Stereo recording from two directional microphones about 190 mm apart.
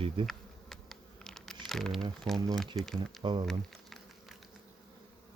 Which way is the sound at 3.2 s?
25° right (ahead or behind).